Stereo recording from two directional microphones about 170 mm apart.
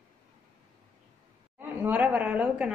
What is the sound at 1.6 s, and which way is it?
A woman's voice, 10° right (ahead or behind).